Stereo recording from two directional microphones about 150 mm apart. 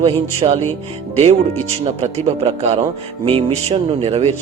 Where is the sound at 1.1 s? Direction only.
45° right (ahead or behind).